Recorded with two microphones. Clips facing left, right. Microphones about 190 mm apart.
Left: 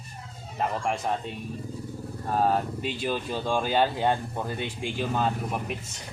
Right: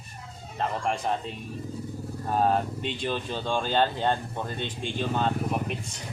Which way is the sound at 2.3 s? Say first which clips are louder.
Even; centre (ahead or behind).